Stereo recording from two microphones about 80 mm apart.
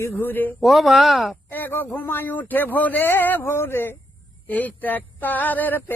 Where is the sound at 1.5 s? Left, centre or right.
Left.